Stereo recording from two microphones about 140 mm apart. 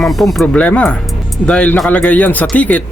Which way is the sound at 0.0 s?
Centre (ahead or behind).